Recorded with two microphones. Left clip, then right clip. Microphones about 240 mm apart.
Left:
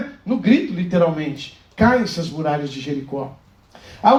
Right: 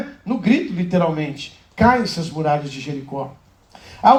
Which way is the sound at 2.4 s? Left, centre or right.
Right.